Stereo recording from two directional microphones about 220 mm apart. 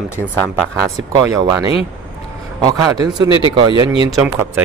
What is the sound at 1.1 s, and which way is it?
A man's voice, 15° right (ahead or behind).